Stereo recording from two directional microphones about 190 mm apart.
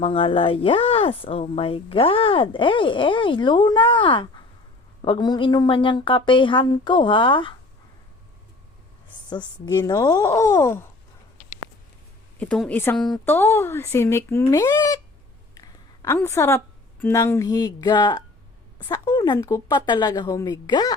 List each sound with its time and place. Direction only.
0.0 s speech: 30° left (ahead or behind)
9.3 s speech: 20° left (ahead or behind)
12.4 s speech: 5° left (ahead or behind)
15.5 s a sound: 20° left (ahead or behind)
16.1 s speech: 15° left (ahead or behind)